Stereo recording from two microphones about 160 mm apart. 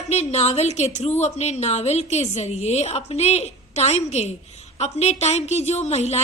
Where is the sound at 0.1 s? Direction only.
45° left (ahead or behind).